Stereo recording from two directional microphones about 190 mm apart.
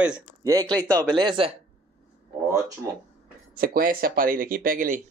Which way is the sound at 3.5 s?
50° right (ahead or behind).